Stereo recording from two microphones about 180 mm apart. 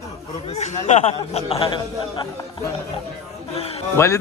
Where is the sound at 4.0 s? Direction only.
15° left (ahead or behind).